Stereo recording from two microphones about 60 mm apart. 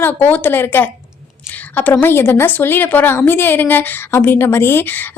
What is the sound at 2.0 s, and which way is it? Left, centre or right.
A woman's voice, left.